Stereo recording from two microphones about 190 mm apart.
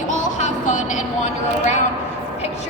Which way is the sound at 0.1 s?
40° left (ahead or behind).